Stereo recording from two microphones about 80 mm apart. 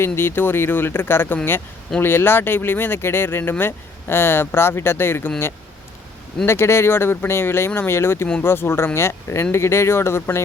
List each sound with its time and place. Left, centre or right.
0.0 s speech: left
6.4 s speech: left